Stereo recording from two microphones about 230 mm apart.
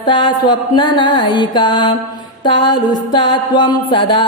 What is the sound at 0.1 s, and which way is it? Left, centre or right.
Music, centre.